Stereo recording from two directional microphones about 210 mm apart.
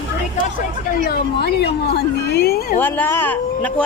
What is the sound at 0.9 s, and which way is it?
Speech, 45° left (ahead or behind).